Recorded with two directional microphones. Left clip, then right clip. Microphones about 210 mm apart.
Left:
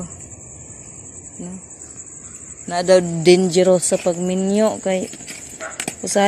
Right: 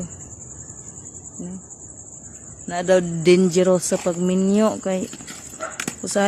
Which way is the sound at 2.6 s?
Centre (ahead or behind).